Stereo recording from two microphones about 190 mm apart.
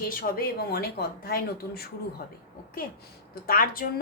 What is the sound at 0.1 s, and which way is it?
A woman's voice, 50° left (ahead or behind).